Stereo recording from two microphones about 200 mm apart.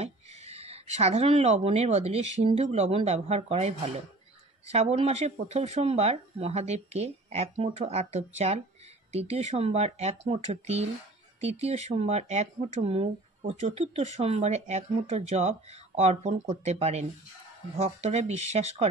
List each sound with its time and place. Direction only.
0.0 s speech: 30° right (ahead or behind)